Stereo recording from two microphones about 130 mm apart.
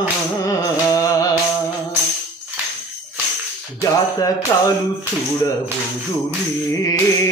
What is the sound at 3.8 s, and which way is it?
Music, 25° left (ahead or behind).